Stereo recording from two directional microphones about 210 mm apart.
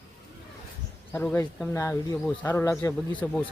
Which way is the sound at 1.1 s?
10° left (ahead or behind).